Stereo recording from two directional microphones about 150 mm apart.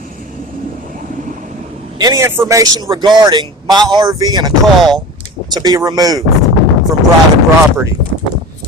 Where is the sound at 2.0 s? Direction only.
25° right (ahead or behind).